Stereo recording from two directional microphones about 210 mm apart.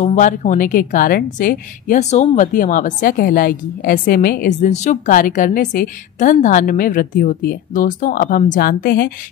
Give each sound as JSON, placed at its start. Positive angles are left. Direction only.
{"t": 0.0, "sound": "a woman's voice", "side_deg": 35}